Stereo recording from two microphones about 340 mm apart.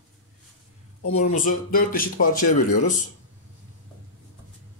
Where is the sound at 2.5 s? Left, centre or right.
Left.